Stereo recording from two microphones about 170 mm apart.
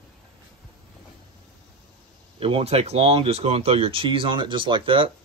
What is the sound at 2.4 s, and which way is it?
Speech, 30° right (ahead or behind).